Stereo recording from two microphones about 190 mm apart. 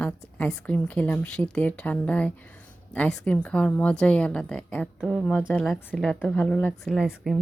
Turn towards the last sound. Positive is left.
turn(degrees=0)  # may be behind; listen again after turning